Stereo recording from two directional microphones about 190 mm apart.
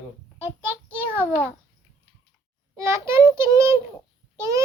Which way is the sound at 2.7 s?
15° right (ahead or behind).